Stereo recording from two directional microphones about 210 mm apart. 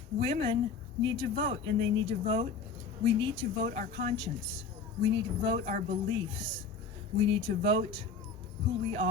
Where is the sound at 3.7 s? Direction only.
30° right (ahead or behind).